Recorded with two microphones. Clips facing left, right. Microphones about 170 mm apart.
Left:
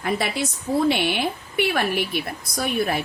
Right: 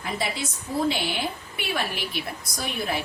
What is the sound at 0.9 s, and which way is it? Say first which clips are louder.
A woman's voice: left 5 dB; 65° left (ahead or behind).